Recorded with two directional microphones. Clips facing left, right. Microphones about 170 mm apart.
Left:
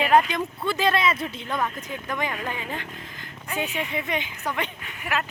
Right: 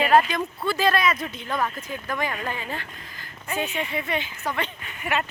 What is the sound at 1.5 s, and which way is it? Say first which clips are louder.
Speech: right 1 dB; centre (ahead or behind).